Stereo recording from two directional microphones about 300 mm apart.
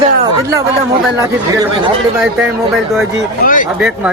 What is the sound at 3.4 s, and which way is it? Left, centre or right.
Speech, left.